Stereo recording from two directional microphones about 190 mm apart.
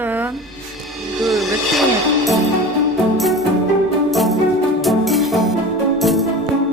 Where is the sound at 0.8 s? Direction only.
Centre (ahead or behind).